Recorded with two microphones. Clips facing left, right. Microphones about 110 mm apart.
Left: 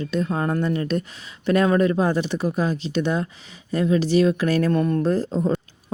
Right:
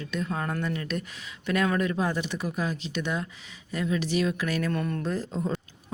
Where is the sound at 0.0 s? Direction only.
35° left (ahead or behind).